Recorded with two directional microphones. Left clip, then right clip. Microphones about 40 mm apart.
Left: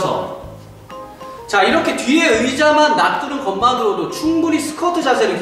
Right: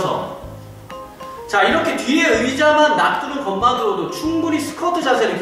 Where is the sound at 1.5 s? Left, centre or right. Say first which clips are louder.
Left 1 dB; left.